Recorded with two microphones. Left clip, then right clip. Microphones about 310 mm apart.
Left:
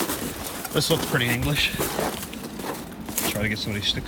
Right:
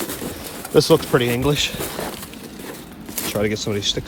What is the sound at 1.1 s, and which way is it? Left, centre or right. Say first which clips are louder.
Speech: right 5 dB; centre.